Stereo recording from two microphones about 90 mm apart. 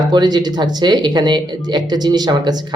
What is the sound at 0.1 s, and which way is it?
Speech, 50° right (ahead or behind).